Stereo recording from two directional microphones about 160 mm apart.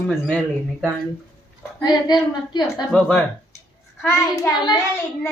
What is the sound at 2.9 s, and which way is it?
A woman's voice, 5° left (ahead or behind).